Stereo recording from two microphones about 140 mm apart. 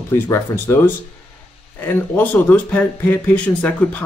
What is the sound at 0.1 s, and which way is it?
Speech, 20° left (ahead or behind).